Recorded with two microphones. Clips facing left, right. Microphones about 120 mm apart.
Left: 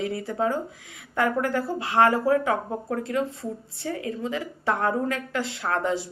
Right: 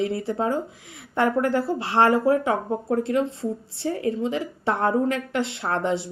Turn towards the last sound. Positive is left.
turn(degrees=-25)  # may be behind; listen again after turning